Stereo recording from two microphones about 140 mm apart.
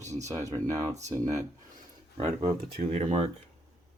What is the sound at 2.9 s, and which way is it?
Speech, 45° right (ahead or behind).